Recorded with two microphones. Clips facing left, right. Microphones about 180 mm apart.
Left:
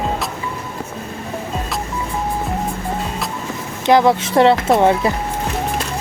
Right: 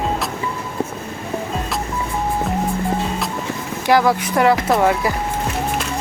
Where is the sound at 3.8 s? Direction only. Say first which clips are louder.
Left 3 dB; 25° left (ahead or behind).